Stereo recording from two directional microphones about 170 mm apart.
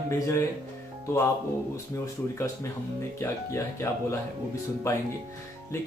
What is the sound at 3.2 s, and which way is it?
Speech, 15° left (ahead or behind).